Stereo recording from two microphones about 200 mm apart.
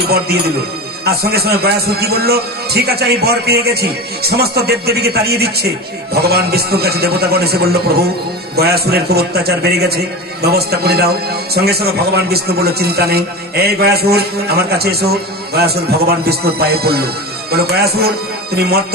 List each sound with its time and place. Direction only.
0.0 s a man's voice: 50° right (ahead or behind)